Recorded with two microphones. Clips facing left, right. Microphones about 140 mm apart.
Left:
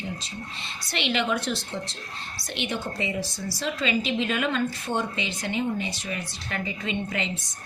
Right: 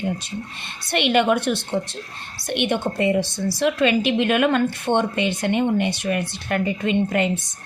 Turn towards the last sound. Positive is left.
turn(degrees=-55)  # may be behind; listen again after turning